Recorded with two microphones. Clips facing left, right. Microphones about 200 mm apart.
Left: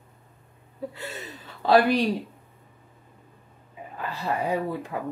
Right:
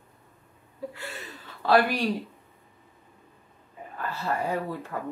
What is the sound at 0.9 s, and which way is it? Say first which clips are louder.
Gasp: left 3 dB; 20° left (ahead or behind).